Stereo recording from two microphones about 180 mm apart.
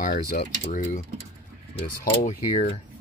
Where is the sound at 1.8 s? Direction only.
50° left (ahead or behind).